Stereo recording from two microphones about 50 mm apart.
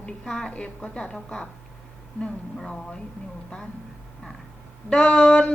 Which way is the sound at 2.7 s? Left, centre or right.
Centre.